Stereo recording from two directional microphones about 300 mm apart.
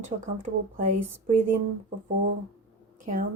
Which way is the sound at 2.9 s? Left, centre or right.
Right.